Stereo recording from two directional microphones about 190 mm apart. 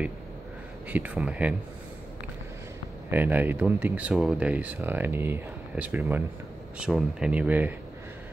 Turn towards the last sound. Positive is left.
turn(degrees=-10)  # may be behind; listen again after turning